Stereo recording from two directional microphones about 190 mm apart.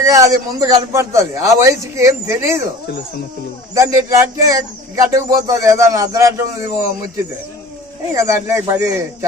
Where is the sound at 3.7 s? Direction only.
15° right (ahead or behind).